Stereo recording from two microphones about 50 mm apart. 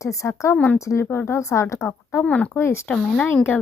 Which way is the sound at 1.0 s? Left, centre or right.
Left.